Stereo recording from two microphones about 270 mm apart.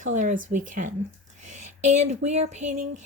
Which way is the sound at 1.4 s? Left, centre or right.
Right.